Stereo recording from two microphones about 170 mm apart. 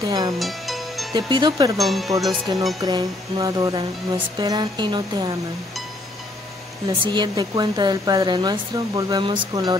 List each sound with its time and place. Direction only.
0.0 s speech: 25° right (ahead or behind)
0.4 s music: centre (ahead or behind)
1.1 s speech: 25° right (ahead or behind)
1.8 s speech: centre (ahead or behind)
2.8 s speech: 20° right (ahead or behind)
6.9 s speech: 25° right (ahead or behind)